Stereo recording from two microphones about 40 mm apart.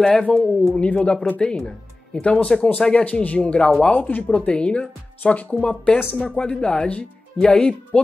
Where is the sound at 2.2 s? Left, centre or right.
Left.